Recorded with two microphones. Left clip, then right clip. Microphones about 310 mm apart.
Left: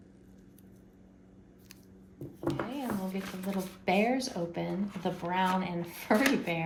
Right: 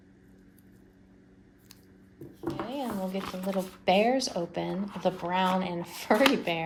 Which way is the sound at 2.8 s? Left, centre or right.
Centre.